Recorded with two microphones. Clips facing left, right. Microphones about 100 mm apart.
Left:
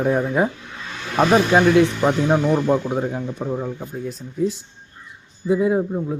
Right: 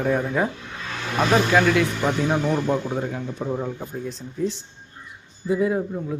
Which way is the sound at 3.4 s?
5° left (ahead or behind).